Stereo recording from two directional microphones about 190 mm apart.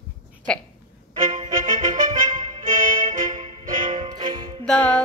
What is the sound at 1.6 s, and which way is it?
Music, 40° right (ahead or behind).